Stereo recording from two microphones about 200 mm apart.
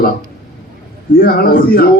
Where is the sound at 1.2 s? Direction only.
45° left (ahead or behind).